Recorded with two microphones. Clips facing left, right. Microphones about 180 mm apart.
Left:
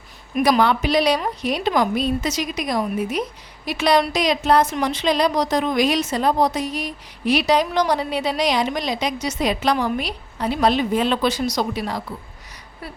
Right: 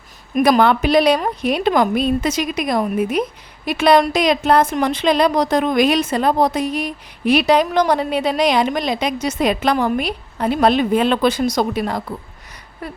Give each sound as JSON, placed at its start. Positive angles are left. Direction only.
{"t": 0.3, "sound": "a woman's voice", "side_deg": -50}